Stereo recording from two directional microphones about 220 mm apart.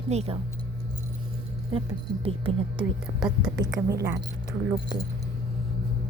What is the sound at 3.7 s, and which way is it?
Speech, 15° right (ahead or behind).